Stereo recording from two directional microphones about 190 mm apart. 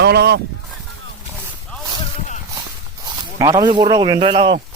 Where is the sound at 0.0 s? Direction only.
60° right (ahead or behind).